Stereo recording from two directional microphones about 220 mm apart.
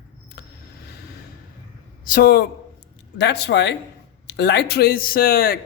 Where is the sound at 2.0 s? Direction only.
45° left (ahead or behind).